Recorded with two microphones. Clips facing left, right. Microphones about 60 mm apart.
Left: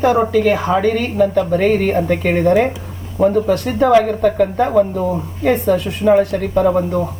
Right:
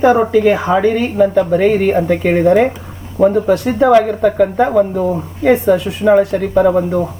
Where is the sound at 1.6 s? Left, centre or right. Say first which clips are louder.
Right 2 dB; centre.